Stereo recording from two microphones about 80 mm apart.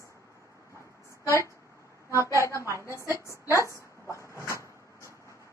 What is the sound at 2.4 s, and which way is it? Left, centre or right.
Speech, left.